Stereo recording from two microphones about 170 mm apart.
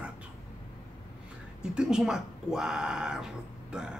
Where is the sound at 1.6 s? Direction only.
5° right (ahead or behind).